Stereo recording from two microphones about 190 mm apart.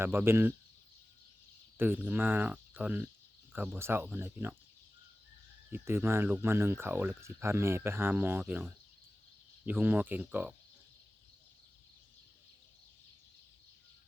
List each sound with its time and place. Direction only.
0.0 s speech: 10° right (ahead or behind)
1.8 s speech: 10° right (ahead or behind)
5.7 s speech: 10° right (ahead or behind)